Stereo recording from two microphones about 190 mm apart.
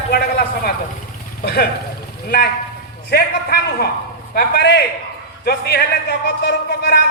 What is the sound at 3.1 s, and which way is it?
A man's voice, 55° left (ahead or behind).